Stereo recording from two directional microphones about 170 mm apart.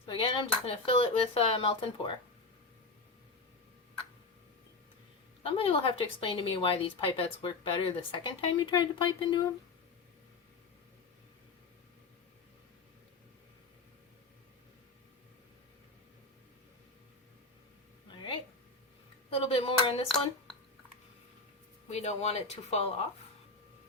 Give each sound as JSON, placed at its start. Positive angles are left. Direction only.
{"t": 0.1, "sound": "dishes", "side_deg": 30}
{"t": 0.6, "sound": "speech", "side_deg": 35}
{"t": 5.4, "sound": "speech", "side_deg": 35}
{"t": 18.1, "sound": "a sound", "side_deg": 25}
{"t": 21.8, "sound": "speech", "side_deg": 40}